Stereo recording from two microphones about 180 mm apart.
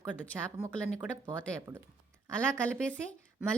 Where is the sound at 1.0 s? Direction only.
15° right (ahead or behind).